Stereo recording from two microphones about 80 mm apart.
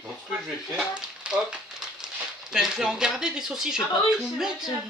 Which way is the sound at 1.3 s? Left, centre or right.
Centre.